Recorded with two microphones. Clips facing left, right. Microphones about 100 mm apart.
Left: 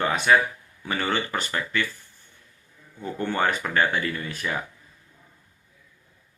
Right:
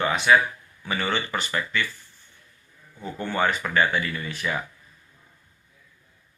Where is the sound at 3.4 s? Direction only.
45° left (ahead or behind).